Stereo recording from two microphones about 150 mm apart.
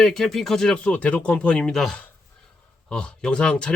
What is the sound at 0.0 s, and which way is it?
A man's voice, 5° left (ahead or behind).